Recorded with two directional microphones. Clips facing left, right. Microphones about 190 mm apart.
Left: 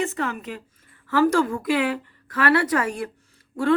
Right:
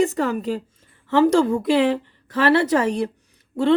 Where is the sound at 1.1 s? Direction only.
25° right (ahead or behind).